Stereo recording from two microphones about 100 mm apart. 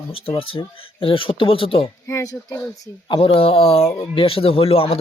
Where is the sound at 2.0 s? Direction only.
30° left (ahead or behind).